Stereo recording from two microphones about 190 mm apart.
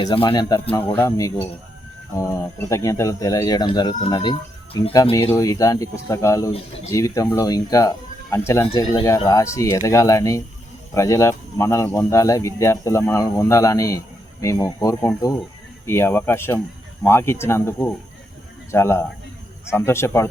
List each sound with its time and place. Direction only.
0.0 s speech: 25° left (ahead or behind)